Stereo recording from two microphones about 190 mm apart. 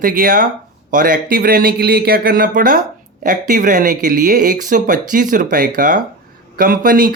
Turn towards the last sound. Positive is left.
turn(degrees=-50)  # may be behind; listen again after turning